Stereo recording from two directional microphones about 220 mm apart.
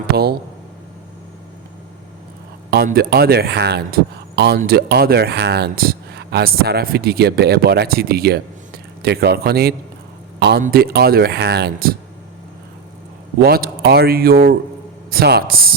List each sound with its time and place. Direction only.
2.6 s speech: 45° right (ahead or behind)
13.4 s speech: 45° right (ahead or behind)